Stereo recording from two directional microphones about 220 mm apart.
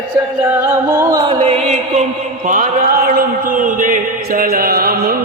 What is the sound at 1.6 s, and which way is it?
Mantra, 35° right (ahead or behind).